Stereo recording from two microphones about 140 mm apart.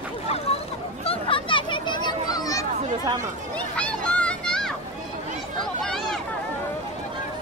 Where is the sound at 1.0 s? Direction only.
40° left (ahead or behind); by 2.7 s 25° left (ahead or behind).